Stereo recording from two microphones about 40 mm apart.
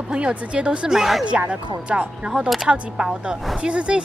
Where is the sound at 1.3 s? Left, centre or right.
Right.